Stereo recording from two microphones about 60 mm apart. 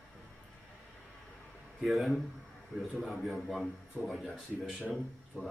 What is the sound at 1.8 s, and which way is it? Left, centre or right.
Speech, centre.